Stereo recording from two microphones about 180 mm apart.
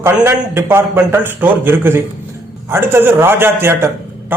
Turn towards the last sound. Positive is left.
turn(degrees=-15)  # may be behind; listen again after turning